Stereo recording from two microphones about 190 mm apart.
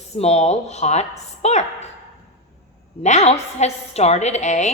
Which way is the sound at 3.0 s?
35° left (ahead or behind).